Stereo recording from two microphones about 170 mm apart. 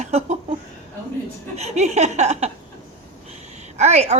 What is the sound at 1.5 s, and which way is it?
Speech, 40° right (ahead or behind).